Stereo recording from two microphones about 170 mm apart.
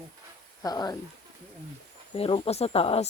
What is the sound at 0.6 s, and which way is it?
Speech, 25° left (ahead or behind).